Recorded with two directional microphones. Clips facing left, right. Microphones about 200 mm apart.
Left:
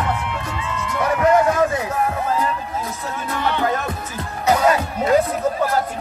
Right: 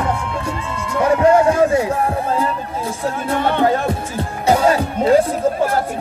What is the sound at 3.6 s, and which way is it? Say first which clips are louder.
Music: right 5 dB; 30° right (ahead or behind).